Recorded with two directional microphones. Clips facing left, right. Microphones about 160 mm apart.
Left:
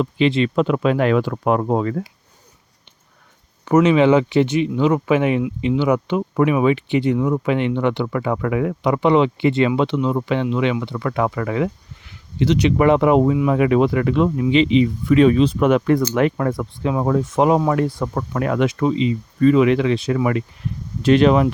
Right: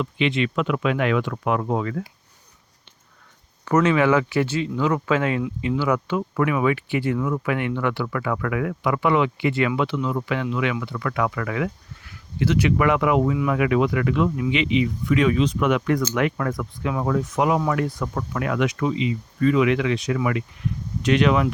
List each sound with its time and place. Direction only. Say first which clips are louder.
0.0 s speech: left 5 dB; 35° left (ahead or behind)
3.7 s speech: left 5 dB; 15° left (ahead or behind); by 21.5 s 35° left (ahead or behind)